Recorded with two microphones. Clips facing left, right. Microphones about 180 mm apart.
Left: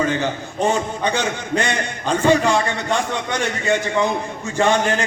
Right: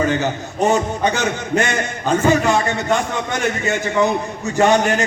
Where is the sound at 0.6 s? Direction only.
40° right (ahead or behind).